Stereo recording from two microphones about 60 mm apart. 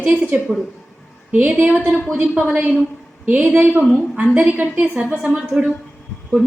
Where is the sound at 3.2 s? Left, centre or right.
Right.